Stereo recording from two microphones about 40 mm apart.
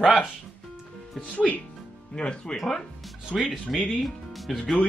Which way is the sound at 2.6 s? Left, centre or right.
Centre.